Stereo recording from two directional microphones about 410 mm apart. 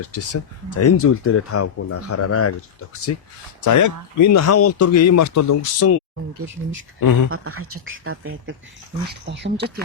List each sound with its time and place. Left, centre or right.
0.0 s speech: left
3.6 s speech: left
7.0 s speech: left
7.3 s speech: right